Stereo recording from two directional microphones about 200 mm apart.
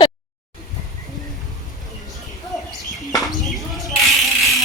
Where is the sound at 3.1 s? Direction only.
Centre (ahead or behind).